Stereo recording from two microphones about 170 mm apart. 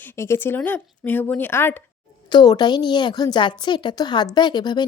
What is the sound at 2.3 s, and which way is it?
Speech, 25° left (ahead or behind).